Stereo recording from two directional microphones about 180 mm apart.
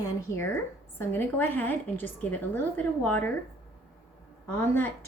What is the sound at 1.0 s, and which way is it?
A woman's voice, 10° left (ahead or behind).